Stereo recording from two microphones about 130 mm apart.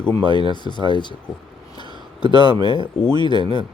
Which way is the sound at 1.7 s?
35° left (ahead or behind).